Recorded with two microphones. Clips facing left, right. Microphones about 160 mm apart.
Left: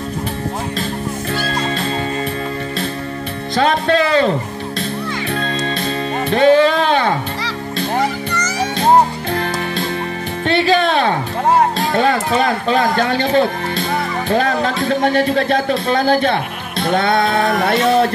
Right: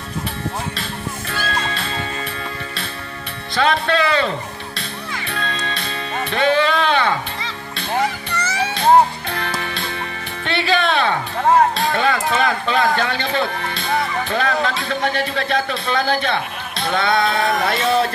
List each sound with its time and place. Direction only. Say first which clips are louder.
1.3 s music: left 3 dB; 35° left (ahead or behind)
3.5 s music: left 3 dB; 40° left (ahead or behind)
5.3 s music: left 4 dB; 40° left (ahead or behind)
9.3 s music: left 5 dB; 45° left (ahead or behind)
11.9 s a man's voice: left 4 dB; 35° left (ahead or behind)
17.7 s a man's voice: left 4 dB; 50° left (ahead or behind)